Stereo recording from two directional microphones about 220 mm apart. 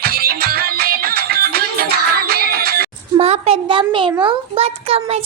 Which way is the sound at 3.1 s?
25° right (ahead or behind).